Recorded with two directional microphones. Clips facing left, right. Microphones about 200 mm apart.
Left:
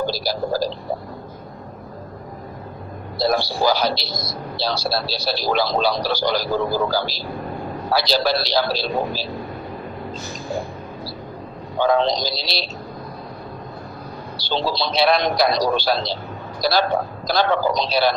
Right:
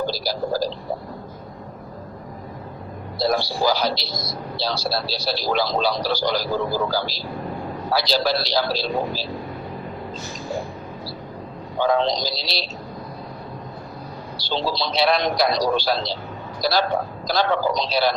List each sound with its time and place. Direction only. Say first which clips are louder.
0.0 s speech: left 2 dB; 65° left (ahead or behind)
3.2 s speech: left 1 dB; 65° left (ahead or behind)
11.8 s speech: left 2 dB; 65° left (ahead or behind)
14.3 s speech: left 2 dB; 65° left (ahead or behind)